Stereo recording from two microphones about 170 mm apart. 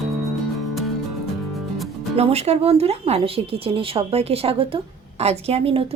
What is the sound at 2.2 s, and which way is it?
Speech, 35° right (ahead or behind).